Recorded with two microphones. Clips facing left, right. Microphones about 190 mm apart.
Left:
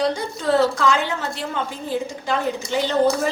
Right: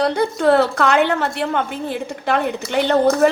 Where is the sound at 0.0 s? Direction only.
60° right (ahead or behind).